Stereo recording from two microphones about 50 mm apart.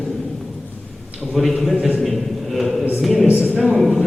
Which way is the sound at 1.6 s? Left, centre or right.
Centre.